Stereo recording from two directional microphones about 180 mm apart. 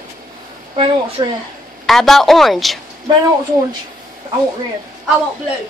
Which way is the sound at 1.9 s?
Centre (ahead or behind).